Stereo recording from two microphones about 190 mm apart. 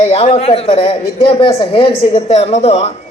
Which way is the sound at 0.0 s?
35° left (ahead or behind).